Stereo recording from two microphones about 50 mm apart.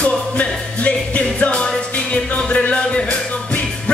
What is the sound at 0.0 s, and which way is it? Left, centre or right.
Music, left.